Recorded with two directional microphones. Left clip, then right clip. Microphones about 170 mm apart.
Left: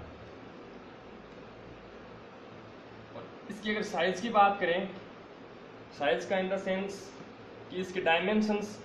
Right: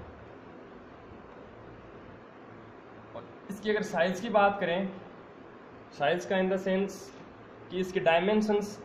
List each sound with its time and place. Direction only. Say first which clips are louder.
3.6 s speech: right 3 dB; 55° right (ahead or behind)
5.9 s speech: right 2 dB; 55° right (ahead or behind)
7.7 s speech: right 3 dB; 55° right (ahead or behind)